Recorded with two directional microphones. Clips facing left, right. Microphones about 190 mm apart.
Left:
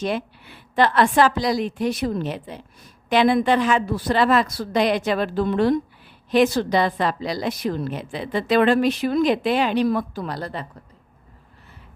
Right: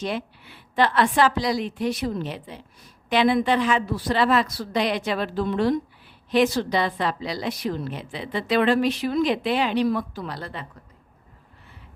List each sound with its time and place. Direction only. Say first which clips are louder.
0.0 s a woman's voice: left 3 dB; 50° left (ahead or behind)